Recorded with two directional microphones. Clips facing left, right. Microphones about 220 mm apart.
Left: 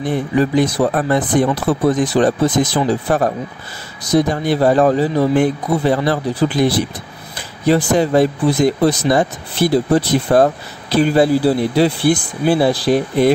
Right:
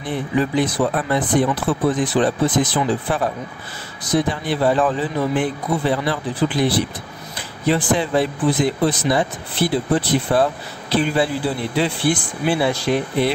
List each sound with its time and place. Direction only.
0.0 s speech: 45° left (ahead or behind)